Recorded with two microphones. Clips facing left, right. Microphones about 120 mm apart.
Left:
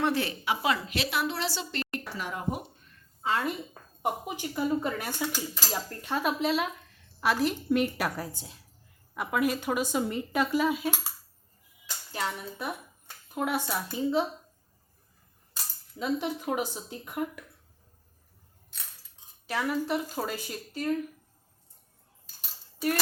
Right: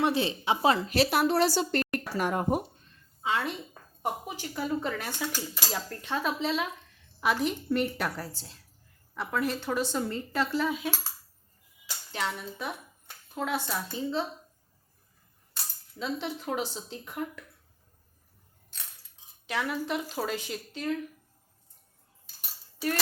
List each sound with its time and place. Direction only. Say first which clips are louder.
0.0 s a woman's voice: right 1 dB; 20° right (ahead or behind); by 2.6 s 50° right (ahead or behind)
3.2 s a woman's voice: left 1 dB; centre (ahead or behind)
4.0 s speech: left 2 dB; 15° left (ahead or behind)
12.1 s a woman's voice: even; 5° left (ahead or behind)
15.5 s speech: left 1 dB; 10° left (ahead or behind)
19.5 s a woman's voice: left 2 dB; 5° left (ahead or behind)